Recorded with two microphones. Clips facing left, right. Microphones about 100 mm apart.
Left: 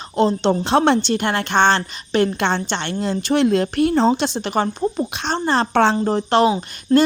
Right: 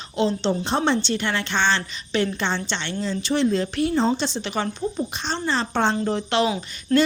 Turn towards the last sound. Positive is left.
turn(degrees=25)  # may be behind; listen again after turning